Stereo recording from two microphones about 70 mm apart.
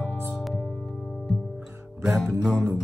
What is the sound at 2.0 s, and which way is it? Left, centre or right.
Music, centre.